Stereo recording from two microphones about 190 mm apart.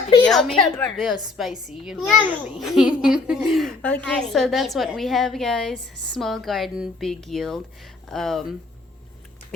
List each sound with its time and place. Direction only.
0.3 s a child's voice: centre (ahead or behind)